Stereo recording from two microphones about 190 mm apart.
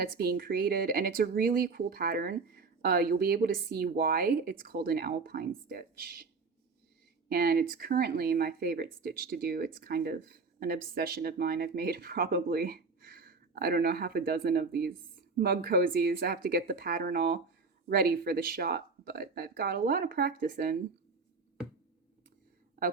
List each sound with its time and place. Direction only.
0.0 s speech: 50° right (ahead or behind)
7.3 s speech: 55° right (ahead or behind)
22.8 s a woman's voice: 50° right (ahead or behind)